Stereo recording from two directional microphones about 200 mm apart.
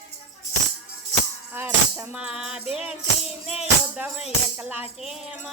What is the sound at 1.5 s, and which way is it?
Music, 10° right (ahead or behind).